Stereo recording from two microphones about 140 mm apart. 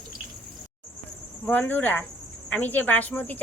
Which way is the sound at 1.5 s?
15° left (ahead or behind).